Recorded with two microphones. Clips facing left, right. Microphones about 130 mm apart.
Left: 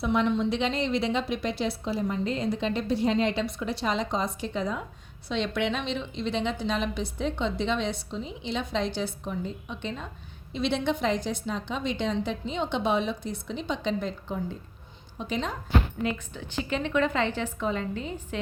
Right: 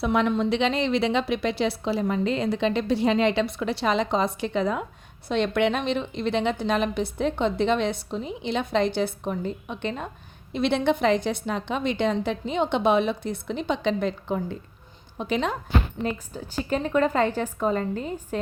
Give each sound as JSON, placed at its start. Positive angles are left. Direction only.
{"t": 0.0, "sound": "a woman's voice", "side_deg": -70}
{"t": 5.3, "sound": "a woman's voice", "side_deg": -55}
{"t": 16.0, "sound": "a woman's voice", "side_deg": -40}